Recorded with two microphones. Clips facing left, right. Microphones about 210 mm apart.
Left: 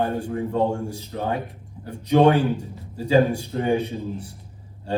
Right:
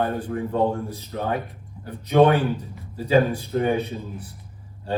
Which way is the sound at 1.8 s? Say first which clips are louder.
Even; 30° left (ahead or behind).